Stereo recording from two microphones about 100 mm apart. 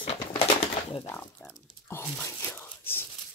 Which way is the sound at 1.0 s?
20° left (ahead or behind).